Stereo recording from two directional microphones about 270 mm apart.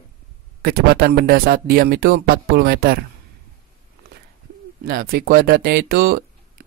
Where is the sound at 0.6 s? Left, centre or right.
Right.